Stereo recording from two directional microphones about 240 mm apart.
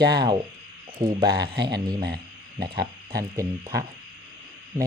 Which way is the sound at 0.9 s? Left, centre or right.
Centre.